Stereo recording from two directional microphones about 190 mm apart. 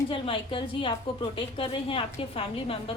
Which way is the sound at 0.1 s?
25° left (ahead or behind).